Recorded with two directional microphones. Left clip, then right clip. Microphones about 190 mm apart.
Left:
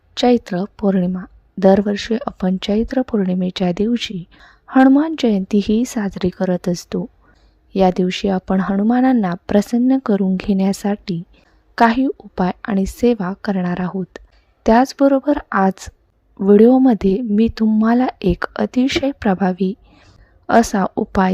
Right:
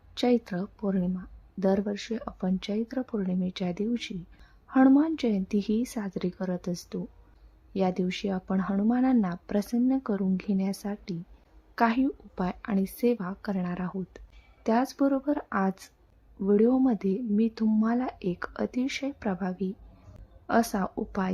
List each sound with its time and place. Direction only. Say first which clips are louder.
0.1 s a woman's voice: left 11 dB; 40° left (ahead or behind)